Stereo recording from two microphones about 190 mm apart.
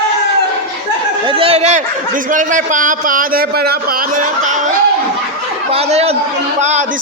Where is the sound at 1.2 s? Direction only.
30° right (ahead or behind).